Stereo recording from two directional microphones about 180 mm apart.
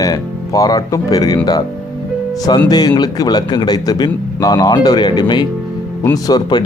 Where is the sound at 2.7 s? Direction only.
20° left (ahead or behind).